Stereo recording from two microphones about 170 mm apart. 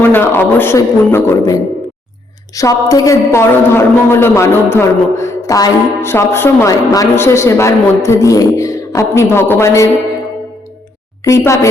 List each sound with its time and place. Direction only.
0.0 s a man's voice: 15° left (ahead or behind)
11.3 s a man's voice: 15° left (ahead or behind)